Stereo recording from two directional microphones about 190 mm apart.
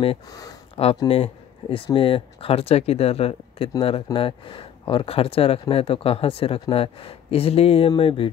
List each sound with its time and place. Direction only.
0.0 s speech: 25° left (ahead or behind)
1.0 s speech: 30° left (ahead or behind)